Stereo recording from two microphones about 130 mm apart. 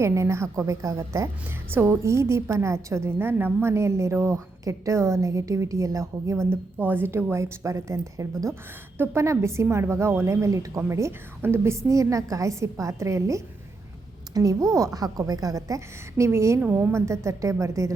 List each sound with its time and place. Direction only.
0.0 s a woman's voice: 20° right (ahead or behind)